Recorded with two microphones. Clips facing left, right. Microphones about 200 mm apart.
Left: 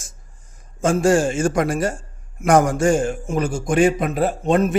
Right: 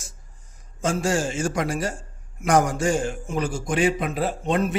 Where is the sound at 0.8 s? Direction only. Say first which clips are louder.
Left 7 dB; 50° left (ahead or behind).